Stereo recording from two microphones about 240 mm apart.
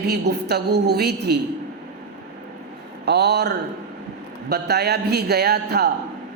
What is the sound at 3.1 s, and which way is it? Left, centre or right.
A woman's voice, right.